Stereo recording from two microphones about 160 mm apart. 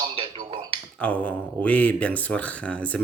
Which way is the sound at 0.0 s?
35° right (ahead or behind).